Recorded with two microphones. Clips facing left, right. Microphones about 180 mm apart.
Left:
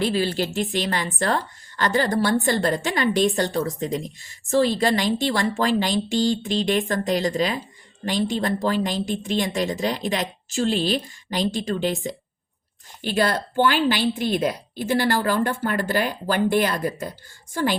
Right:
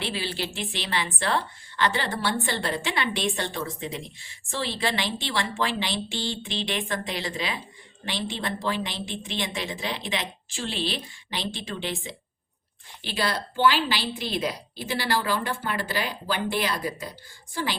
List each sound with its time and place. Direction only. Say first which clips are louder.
0.0 s a woman's voice: left 8 dB; 45° left (ahead or behind)